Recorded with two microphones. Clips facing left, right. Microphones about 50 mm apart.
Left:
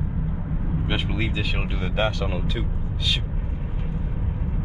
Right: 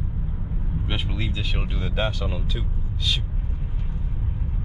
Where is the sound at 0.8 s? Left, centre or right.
Left.